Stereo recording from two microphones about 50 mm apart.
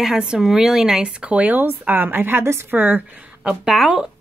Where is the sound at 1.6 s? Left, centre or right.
Right.